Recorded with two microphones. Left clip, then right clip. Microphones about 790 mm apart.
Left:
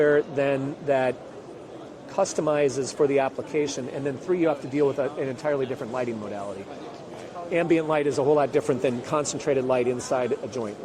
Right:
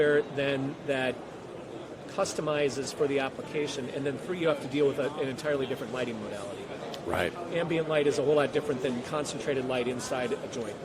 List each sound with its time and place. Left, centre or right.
0.0 s a man's voice: left
2.1 s a man's voice: left
7.5 s a man's voice: left